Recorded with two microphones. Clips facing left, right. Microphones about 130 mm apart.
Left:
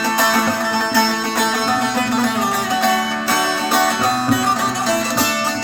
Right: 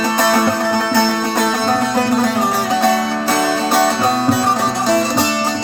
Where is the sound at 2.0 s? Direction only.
35° right (ahead or behind).